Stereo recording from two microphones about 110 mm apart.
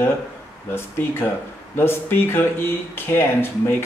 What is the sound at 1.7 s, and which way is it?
Speech, 20° left (ahead or behind).